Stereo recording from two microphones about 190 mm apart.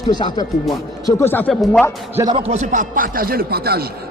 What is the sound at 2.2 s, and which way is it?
Speech, 25° right (ahead or behind).